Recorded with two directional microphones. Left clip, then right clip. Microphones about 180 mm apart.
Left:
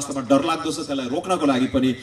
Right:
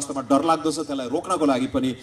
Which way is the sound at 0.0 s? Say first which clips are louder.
Left 1 dB; 30° right (ahead or behind).